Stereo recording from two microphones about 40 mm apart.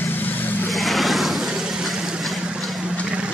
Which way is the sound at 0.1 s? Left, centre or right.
Left.